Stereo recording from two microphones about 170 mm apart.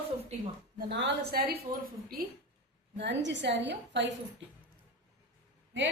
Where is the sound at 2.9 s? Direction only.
90° right.